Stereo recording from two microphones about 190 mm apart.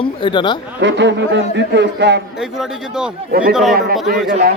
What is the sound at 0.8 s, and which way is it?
A man's voice, 70° right (ahead or behind).